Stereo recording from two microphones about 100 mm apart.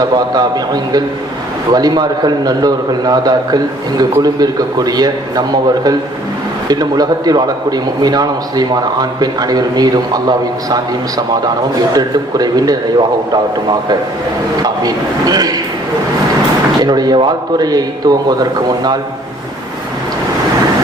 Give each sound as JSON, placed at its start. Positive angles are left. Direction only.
{"t": 0.0, "sound": "a man's voice", "side_deg": -45}
{"t": 11.9, "sound": "a man's voice", "side_deg": -40}
{"t": 14.6, "sound": "a man's voice", "side_deg": -40}
{"t": 16.8, "sound": "a man's voice", "side_deg": -40}